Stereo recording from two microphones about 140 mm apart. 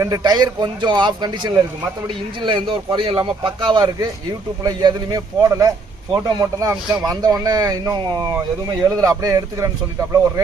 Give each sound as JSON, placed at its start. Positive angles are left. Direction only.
{"t": 0.0, "sound": "speech", "side_deg": -25}